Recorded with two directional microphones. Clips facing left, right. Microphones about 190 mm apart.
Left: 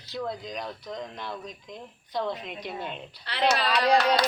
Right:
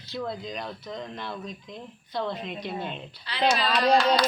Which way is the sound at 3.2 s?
65° left (ahead or behind).